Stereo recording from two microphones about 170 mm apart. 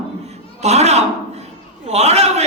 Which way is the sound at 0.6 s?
40° right (ahead or behind).